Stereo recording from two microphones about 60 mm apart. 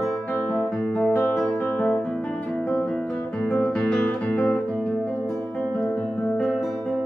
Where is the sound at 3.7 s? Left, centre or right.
Centre.